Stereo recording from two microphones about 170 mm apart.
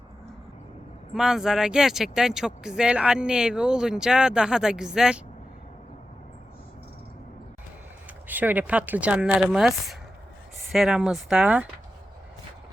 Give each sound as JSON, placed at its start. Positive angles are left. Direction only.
{"t": 1.1, "sound": "speech", "side_deg": 0}
{"t": 8.3, "sound": "speech", "side_deg": -10}